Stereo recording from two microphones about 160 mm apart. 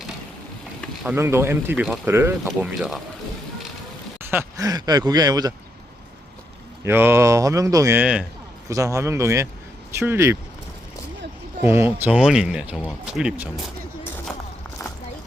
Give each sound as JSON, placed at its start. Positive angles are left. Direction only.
{"t": 1.0, "sound": "speech", "side_deg": -15}
{"t": 2.6, "sound": "speech", "side_deg": 0}
{"t": 4.3, "sound": "speech", "side_deg": -20}
{"t": 6.8, "sound": "speech", "side_deg": -15}
{"t": 8.7, "sound": "speech", "side_deg": -20}
{"t": 11.6, "sound": "speech", "side_deg": -15}